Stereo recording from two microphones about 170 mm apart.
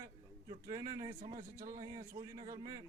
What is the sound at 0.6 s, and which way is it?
A man's voice, 20° right (ahead or behind).